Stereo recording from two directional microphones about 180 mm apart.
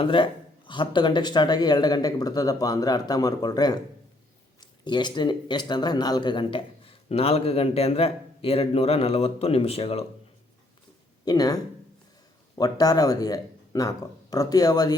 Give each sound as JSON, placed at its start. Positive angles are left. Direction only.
{"t": 0.0, "sound": "speech", "side_deg": 30}
{"t": 11.3, "sound": "speech", "side_deg": 20}